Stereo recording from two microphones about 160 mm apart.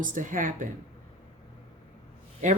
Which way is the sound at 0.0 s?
55° right (ahead or behind).